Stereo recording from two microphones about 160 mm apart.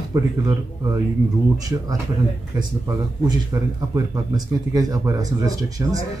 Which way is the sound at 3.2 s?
20° right (ahead or behind).